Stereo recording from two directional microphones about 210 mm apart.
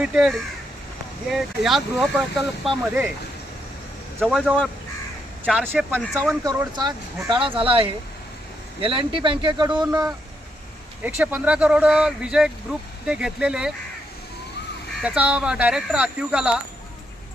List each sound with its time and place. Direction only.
0.0 s speech: 5° right (ahead or behind)
4.2 s speech: centre (ahead or behind)
15.0 s speech: 5° right (ahead or behind)